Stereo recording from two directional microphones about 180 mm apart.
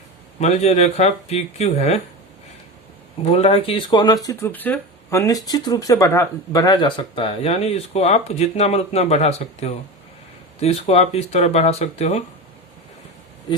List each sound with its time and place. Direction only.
0.3 s speech: 40° left (ahead or behind)
3.3 s speech: 35° left (ahead or behind)